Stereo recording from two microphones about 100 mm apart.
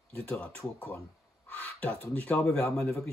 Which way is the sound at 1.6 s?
15° left (ahead or behind).